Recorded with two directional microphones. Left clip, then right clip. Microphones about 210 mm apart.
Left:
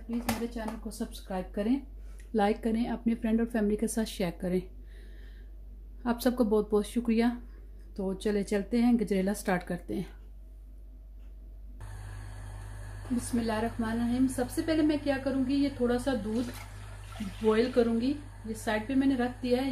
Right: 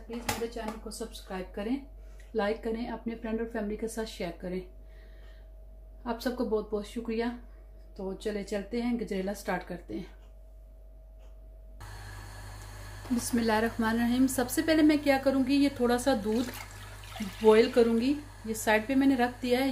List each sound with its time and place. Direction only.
0.8 s speech: 45° left (ahead or behind)
6.0 s speech: 55° left (ahead or behind)
13.4 s a woman's voice: 25° right (ahead or behind)
17.5 s a woman's voice: 20° right (ahead or behind)